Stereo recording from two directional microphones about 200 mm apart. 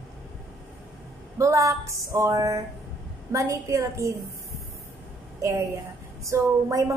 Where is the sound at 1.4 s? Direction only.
15° right (ahead or behind).